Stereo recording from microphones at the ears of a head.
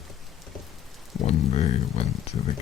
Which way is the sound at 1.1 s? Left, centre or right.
Left.